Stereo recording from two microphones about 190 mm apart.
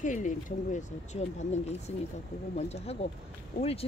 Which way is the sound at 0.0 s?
40° left (ahead or behind).